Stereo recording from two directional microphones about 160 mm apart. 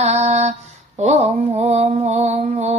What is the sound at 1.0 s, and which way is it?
Mantra, 45° right (ahead or behind).